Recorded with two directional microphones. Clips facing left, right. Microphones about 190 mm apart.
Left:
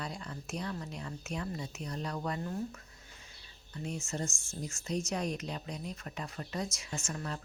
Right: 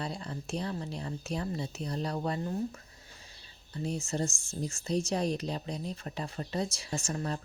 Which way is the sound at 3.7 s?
35° right (ahead or behind).